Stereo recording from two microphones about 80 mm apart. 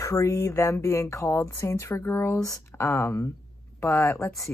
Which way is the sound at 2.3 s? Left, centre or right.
Left.